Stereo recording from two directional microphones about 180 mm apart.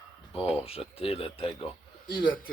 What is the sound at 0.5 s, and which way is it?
Speech, 35° left (ahead or behind).